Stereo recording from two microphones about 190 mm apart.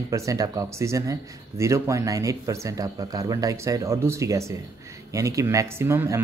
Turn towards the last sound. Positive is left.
turn(degrees=-15)  # may be behind; listen again after turning